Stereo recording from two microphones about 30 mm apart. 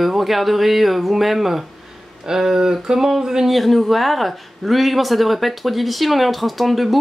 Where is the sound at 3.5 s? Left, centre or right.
Centre.